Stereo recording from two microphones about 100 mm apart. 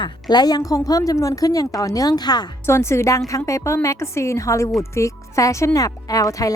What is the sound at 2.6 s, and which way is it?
A woman's voice, 30° left (ahead or behind).